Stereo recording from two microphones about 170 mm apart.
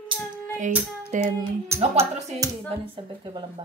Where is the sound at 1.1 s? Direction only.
45° right (ahead or behind).